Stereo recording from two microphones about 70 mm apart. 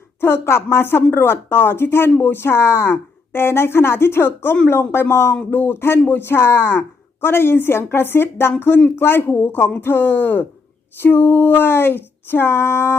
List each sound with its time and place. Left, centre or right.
0.2 s a woman's voice: left